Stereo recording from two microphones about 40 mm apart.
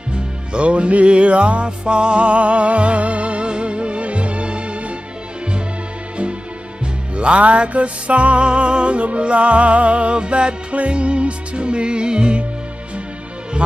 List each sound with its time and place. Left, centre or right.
0.1 s music: right
7.2 s music: right